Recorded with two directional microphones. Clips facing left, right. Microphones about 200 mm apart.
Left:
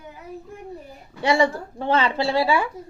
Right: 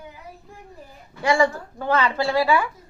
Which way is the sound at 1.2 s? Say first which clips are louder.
Even; 25° left (ahead or behind).